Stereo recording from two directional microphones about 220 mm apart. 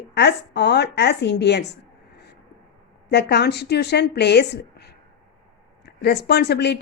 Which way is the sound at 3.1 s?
50° left (ahead or behind).